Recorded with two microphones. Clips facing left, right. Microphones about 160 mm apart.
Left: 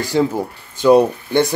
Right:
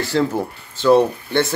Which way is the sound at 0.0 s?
15° left (ahead or behind).